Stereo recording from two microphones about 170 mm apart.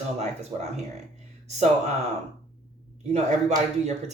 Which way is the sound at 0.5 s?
25° right (ahead or behind).